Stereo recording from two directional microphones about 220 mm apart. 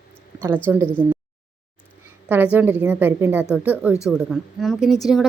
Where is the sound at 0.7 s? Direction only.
10° right (ahead or behind).